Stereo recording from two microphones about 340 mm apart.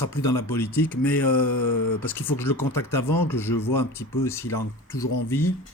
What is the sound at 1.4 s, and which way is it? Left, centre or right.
Mantra, left.